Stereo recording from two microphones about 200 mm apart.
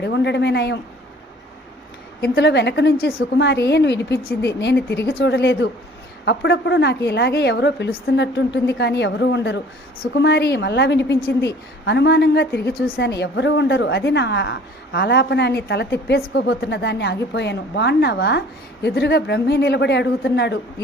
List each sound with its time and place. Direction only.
0.0 s a woman's voice: 60° left (ahead or behind)
2.2 s a woman's voice: 55° left (ahead or behind)